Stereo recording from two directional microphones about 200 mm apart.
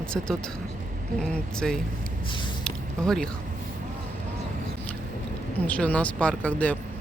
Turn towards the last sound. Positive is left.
turn(degrees=5)  # may be behind; listen again after turning